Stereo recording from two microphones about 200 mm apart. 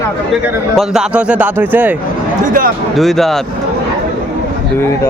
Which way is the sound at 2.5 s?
45° right (ahead or behind).